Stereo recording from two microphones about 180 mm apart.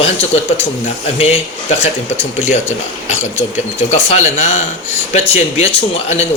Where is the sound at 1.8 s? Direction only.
40° left (ahead or behind).